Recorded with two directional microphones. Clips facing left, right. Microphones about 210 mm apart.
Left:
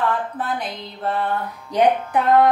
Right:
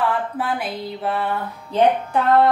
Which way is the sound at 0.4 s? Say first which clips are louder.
Right 2 dB; 10° right (ahead or behind).